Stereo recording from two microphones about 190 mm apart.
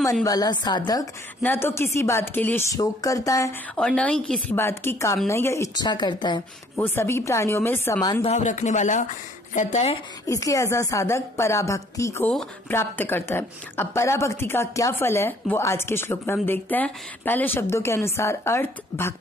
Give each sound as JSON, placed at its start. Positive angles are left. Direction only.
{"t": 0.2, "sound": "a woman's voice", "side_deg": 20}
{"t": 3.7, "sound": "a woman's voice", "side_deg": 5}
{"t": 6.8, "sound": "speech", "side_deg": 15}
{"t": 8.1, "sound": "speech", "side_deg": 30}
{"t": 10.2, "sound": "speech", "side_deg": 15}